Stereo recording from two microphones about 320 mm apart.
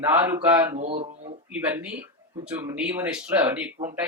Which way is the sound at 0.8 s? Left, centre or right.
Right.